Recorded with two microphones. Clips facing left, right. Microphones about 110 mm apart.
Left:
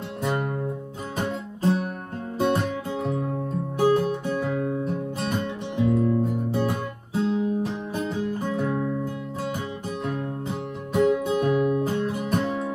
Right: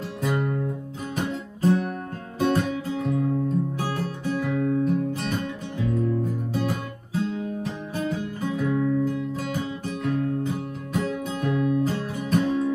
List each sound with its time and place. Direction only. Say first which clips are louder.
0.2 s music: right 1 dB; 25° left (ahead or behind)